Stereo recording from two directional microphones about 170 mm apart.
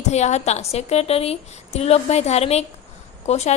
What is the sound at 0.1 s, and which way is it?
A woman's voice, 40° left (ahead or behind).